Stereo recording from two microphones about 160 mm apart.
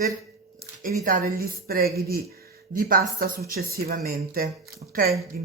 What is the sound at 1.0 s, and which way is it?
A woman's voice, 60° right (ahead or behind).